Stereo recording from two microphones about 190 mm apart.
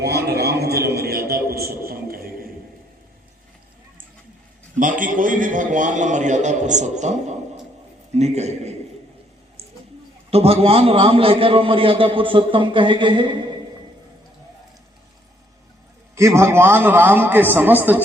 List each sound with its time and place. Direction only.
0.0 s music: 60° right (ahead or behind)
1.9 s a sound: 50° right (ahead or behind)
4.8 s a man's voice: 45° right (ahead or behind)
10.3 s a man's voice: 30° right (ahead or behind)
16.1 s a man's voice: 15° right (ahead or behind)